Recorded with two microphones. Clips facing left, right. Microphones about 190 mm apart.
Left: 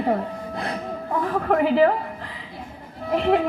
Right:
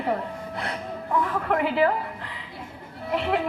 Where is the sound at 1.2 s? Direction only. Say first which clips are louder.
Left 9 dB; 35° left (ahead or behind).